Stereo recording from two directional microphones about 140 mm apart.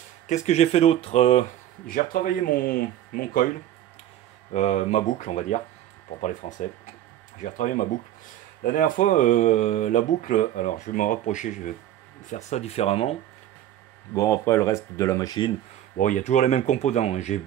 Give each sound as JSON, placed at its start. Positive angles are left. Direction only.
{"t": 0.3, "sound": "speech", "side_deg": 50}
{"t": 1.9, "sound": "speech", "side_deg": 85}
{"t": 4.5, "sound": "speech", "side_deg": 55}
{"t": 7.4, "sound": "speech", "side_deg": 65}
{"t": 14.1, "sound": "speech", "side_deg": 20}
{"t": 16.0, "sound": "speech", "side_deg": 60}